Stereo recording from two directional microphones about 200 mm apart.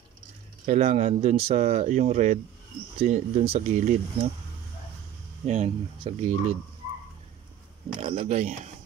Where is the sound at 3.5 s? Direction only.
35° right (ahead or behind).